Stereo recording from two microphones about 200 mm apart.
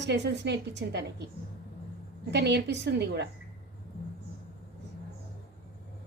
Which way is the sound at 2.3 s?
60° right (ahead or behind).